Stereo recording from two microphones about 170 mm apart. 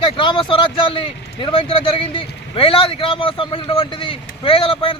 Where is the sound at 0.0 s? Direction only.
30° left (ahead or behind).